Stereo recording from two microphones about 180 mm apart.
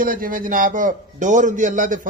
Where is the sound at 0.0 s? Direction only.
50° right (ahead or behind).